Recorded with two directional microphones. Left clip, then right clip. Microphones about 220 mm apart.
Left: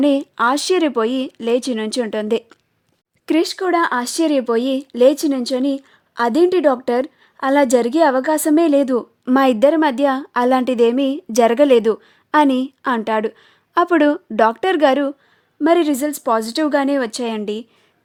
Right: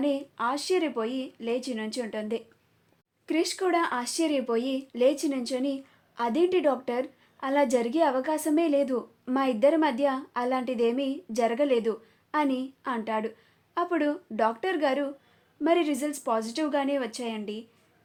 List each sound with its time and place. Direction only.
0.0 s speech: 50° left (ahead or behind)